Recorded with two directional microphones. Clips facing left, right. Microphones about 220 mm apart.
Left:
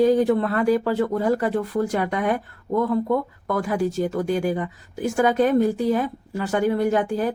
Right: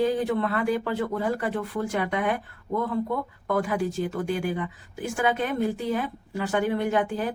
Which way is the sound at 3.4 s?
40° left (ahead or behind).